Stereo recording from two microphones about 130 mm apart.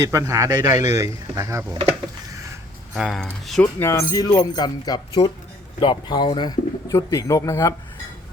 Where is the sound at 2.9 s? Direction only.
Centre (ahead or behind).